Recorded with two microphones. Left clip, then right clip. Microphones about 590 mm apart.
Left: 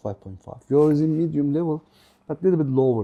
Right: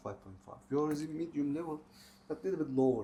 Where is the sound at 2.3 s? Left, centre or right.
Left.